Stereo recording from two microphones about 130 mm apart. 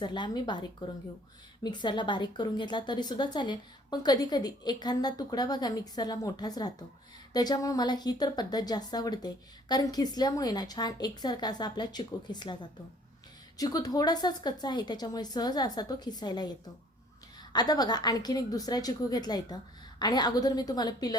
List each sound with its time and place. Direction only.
0.0 s a woman's voice: 35° left (ahead or behind)
13.6 s a woman's voice: 30° left (ahead or behind)